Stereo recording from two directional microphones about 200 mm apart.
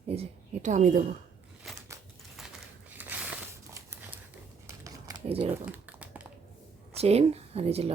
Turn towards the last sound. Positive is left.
turn(degrees=-30)  # may be behind; listen again after turning